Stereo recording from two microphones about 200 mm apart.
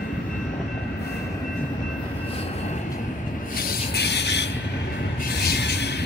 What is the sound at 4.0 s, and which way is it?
Train, 55° left (ahead or behind).